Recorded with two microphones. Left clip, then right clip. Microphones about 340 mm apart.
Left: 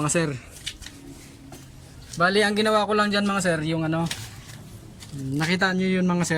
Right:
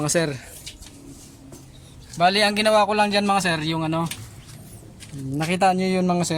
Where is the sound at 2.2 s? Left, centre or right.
Centre.